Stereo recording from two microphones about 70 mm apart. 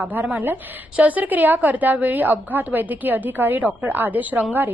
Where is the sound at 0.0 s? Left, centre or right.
Right.